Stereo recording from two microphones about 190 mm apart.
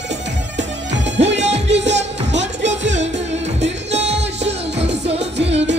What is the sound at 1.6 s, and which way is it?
Music, 65° right (ahead or behind).